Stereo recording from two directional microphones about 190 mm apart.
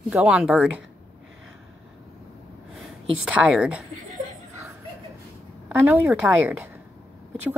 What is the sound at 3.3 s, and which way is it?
Speech, 5° right (ahead or behind).